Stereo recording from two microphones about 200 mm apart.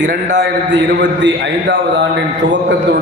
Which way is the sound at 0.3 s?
60° right (ahead or behind).